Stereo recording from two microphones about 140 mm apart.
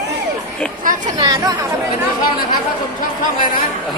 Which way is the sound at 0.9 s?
75° right (ahead or behind).